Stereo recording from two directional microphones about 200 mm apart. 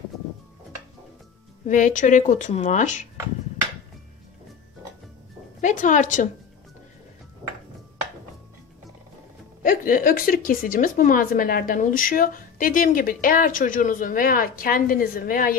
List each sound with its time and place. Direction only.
1.7 s speech: 40° left (ahead or behind)
5.6 s speech: 40° left (ahead or behind)
9.6 s a woman's voice: 45° left (ahead or behind)